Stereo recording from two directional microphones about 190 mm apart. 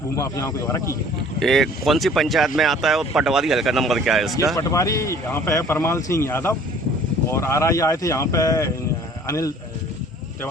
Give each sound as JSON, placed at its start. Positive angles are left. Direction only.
{"t": 0.2, "sound": "speech", "side_deg": 15}
{"t": 1.4, "sound": "speech", "side_deg": 0}
{"t": 4.5, "sound": "speech", "side_deg": 15}